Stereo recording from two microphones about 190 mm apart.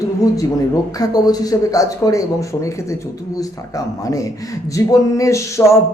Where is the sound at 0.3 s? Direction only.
20° left (ahead or behind).